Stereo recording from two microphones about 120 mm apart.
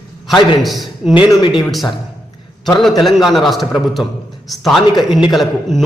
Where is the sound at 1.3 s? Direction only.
40° left (ahead or behind).